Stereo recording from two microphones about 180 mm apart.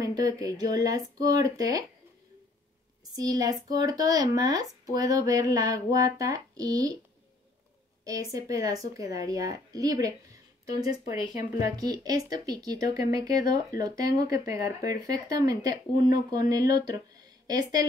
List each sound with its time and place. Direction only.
0.0 s speech: 20° right (ahead or behind)
3.2 s speech: 20° right (ahead or behind)
8.0 s speech: 20° right (ahead or behind)